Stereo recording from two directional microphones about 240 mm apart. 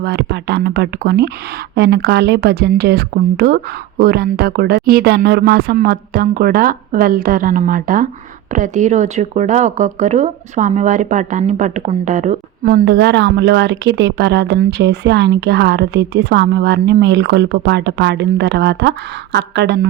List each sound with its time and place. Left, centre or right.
0.0 s speech: right